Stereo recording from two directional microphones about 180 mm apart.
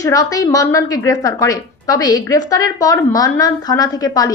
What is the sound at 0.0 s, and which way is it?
A woman's voice, 20° left (ahead or behind).